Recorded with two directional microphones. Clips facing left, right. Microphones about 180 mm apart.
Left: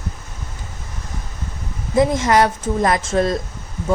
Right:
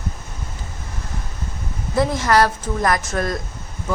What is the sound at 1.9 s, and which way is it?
Speech, 20° left (ahead or behind).